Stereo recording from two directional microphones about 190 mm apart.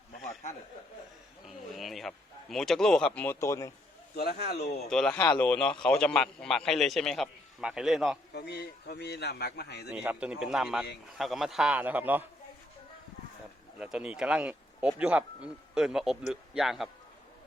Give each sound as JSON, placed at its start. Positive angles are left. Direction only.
{"t": 1.5, "sound": "a sound", "side_deg": 0}
{"t": 4.1, "sound": "a man's voice", "side_deg": 55}
{"t": 4.9, "sound": "a man's voice", "side_deg": 5}
{"t": 8.3, "sound": "a man's voice", "side_deg": 60}
{"t": 9.9, "sound": "a man's voice", "side_deg": -10}
{"t": 13.7, "sound": "a man's voice", "side_deg": -5}